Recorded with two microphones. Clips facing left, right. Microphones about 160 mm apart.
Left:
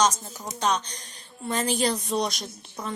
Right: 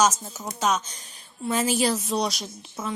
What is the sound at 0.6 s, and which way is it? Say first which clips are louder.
A woman's voice: right 1 dB; 5° right (ahead or behind).